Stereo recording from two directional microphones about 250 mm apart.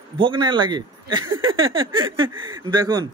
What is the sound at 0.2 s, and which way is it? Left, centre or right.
A man's voice, centre.